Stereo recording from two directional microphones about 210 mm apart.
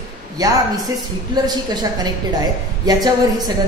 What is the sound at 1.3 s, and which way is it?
A woman's voice, 20° right (ahead or behind).